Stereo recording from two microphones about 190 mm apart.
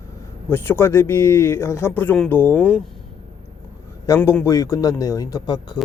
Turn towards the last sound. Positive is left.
turn(degrees=20)  # may be behind; listen again after turning